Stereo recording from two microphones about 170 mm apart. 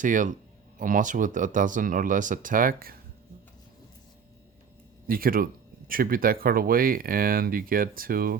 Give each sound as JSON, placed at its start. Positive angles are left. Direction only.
{"t": 0.0, "sound": "speech", "side_deg": -50}
{"t": 5.0, "sound": "speech", "side_deg": -60}